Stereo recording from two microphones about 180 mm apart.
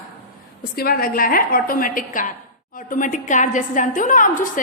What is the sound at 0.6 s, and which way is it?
A woman's voice, 55° left (ahead or behind).